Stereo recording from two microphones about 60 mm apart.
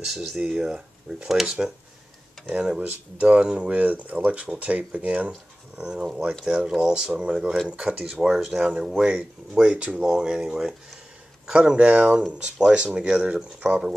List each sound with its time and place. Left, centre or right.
0.0 s speech: centre
3.2 s speech: centre